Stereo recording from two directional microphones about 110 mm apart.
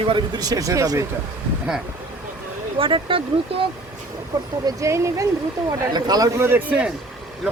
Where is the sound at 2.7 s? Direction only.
55° right (ahead or behind).